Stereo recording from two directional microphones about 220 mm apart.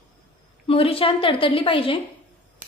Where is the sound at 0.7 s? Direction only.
25° left (ahead or behind).